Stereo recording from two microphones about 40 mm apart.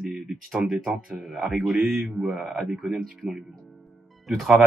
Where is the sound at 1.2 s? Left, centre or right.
Centre.